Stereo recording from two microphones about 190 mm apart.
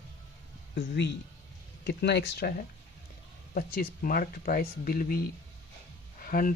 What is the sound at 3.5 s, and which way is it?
Speech, 50° left (ahead or behind).